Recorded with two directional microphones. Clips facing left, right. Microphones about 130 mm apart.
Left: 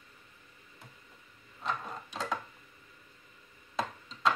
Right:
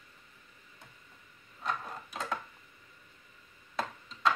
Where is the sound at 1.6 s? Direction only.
Centre (ahead or behind).